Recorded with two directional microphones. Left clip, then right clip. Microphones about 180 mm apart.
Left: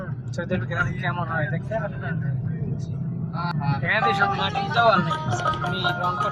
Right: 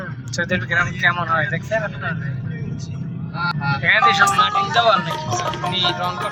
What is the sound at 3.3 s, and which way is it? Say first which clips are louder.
Speech: right 7 dB; 15° left (ahead or behind).